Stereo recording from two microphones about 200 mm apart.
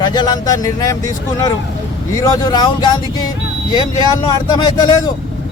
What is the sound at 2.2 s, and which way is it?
Speech, 20° left (ahead or behind).